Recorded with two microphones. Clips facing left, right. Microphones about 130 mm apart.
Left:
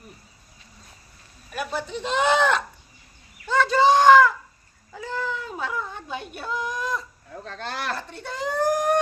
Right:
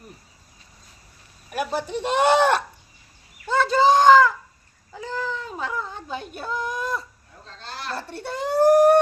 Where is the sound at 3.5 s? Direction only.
Centre (ahead or behind).